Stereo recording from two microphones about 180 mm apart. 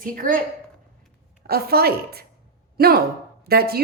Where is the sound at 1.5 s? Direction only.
60° right (ahead or behind).